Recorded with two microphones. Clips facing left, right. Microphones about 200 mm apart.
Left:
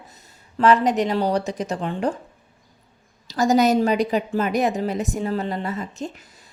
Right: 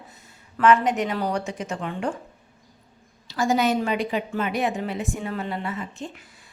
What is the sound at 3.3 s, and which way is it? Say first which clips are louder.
A woman's voice: left 4 dB; 40° left (ahead or behind).